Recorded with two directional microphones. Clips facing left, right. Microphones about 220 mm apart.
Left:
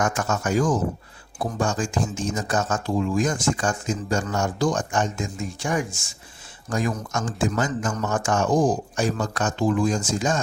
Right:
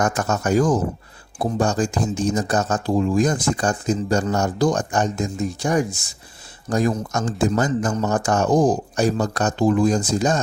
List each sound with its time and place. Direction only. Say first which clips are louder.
0.0 s speech: right 3 dB; 40° right (ahead or behind)